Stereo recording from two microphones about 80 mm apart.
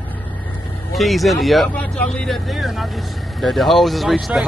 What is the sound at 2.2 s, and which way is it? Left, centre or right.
Speech, centre.